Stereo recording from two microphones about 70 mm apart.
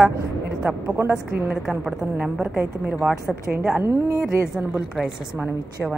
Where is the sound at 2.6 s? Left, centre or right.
Right.